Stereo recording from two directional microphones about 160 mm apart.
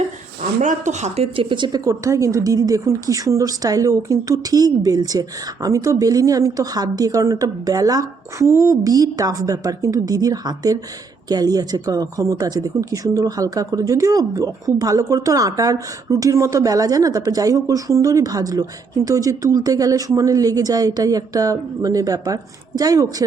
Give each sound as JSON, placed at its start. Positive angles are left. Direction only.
{"t": 0.6, "sound": "speech", "side_deg": -50}